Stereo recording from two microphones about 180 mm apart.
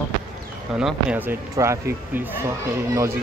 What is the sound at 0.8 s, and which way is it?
Speech, 5° right (ahead or behind).